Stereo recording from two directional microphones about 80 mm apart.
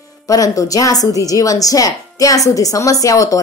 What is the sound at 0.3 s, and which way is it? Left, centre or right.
A woman's voice, left.